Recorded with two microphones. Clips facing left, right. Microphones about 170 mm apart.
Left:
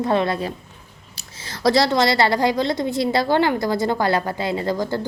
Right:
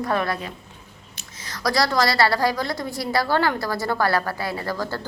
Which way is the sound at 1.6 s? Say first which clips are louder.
Left 4 dB; 25° left (ahead or behind).